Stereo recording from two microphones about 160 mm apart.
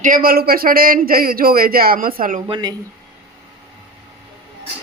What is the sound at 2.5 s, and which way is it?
Speech, 25° right (ahead or behind).